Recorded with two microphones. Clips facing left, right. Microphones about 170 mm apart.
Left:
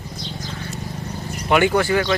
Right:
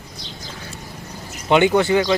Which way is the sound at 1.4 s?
20° right (ahead or behind).